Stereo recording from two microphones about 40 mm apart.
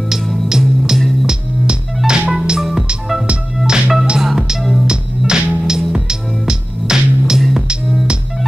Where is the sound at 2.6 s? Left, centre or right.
Centre.